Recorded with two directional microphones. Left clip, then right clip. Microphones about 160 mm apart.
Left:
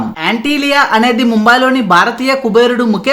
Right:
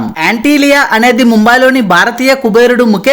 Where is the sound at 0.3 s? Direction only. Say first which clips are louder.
Right 5 dB; 45° right (ahead or behind).